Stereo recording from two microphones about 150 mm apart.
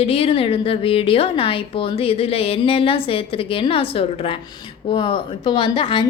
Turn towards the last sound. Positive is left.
turn(degrees=35)  # may be behind; listen again after turning